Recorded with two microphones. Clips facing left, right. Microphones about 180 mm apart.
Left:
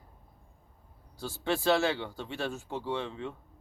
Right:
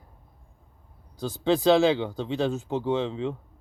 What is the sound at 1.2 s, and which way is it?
Speech, 15° right (ahead or behind).